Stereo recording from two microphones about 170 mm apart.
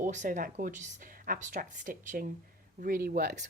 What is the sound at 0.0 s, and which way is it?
Speech, 50° right (ahead or behind).